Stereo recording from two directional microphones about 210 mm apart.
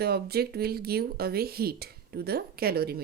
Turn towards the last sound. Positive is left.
turn(degrees=-45)  # may be behind; listen again after turning